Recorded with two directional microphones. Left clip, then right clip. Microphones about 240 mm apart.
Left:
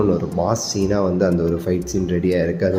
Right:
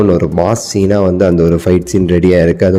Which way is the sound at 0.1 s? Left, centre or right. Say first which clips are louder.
Right 8 dB; right.